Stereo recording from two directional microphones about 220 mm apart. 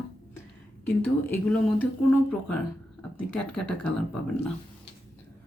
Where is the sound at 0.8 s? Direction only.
10° left (ahead or behind).